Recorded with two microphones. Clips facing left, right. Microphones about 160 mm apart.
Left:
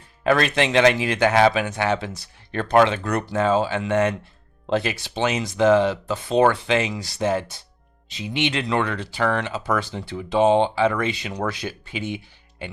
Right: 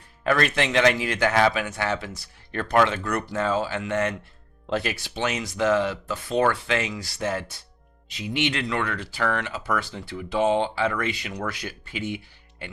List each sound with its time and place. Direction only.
0.3 s speech: 25° left (ahead or behind)